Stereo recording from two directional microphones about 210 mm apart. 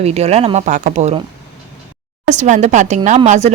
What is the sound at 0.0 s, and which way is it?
Speech, 30° right (ahead or behind).